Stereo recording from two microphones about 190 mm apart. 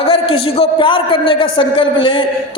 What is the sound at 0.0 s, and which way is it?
A man's voice, 30° left (ahead or behind).